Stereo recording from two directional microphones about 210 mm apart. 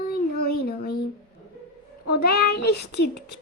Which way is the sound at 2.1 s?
50° left (ahead or behind).